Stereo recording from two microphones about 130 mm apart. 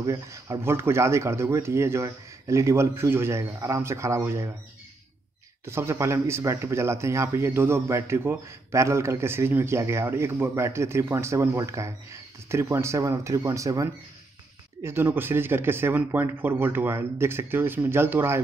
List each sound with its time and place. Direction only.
0.0 s speech: 25° right (ahead or behind)
5.7 s speech: 20° right (ahead or behind)